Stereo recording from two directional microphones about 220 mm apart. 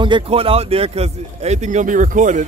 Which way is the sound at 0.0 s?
25° right (ahead or behind).